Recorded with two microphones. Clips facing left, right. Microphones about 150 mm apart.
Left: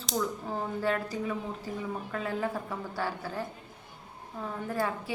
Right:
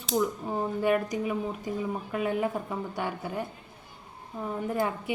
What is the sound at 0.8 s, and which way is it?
A woman's voice, 15° right (ahead or behind).